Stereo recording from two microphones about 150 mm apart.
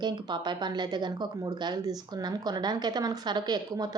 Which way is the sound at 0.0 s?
30° right (ahead or behind).